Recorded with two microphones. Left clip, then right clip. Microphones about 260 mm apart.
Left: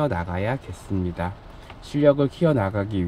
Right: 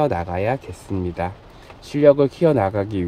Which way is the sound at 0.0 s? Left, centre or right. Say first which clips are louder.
Right 5 dB; centre.